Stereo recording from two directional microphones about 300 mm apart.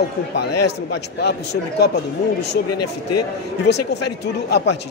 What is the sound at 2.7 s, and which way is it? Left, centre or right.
Speech, left.